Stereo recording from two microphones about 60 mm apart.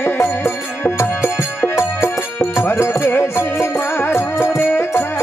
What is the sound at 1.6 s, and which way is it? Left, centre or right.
Music, left.